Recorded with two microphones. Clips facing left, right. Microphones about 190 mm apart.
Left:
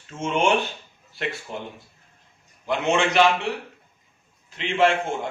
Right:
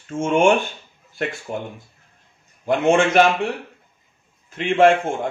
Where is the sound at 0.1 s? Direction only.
50° right (ahead or behind).